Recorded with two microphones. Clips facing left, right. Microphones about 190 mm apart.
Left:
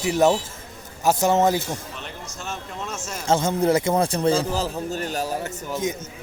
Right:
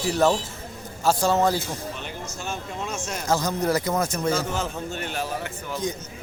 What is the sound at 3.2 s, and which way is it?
A man's voice, 25° left (ahead or behind).